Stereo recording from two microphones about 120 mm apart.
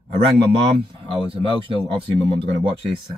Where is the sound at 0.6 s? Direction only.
50° right (ahead or behind).